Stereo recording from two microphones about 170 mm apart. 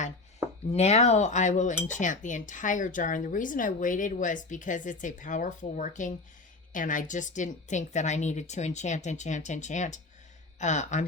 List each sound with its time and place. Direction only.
0.7 s cutlery: 40° left (ahead or behind)